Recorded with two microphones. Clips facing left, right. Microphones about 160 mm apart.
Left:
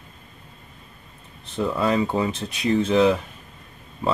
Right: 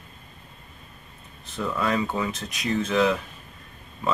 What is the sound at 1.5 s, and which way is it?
Speech, 25° left (ahead or behind).